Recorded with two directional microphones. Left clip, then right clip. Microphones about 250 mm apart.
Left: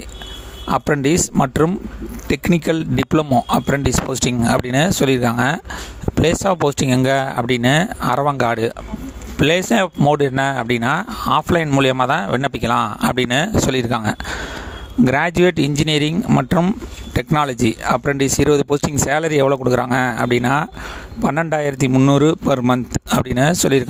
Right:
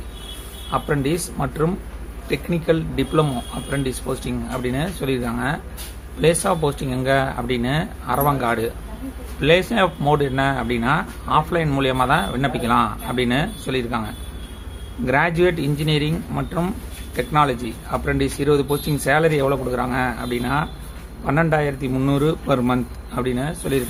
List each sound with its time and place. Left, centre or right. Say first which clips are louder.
0.7 s speech: left 5 dB; left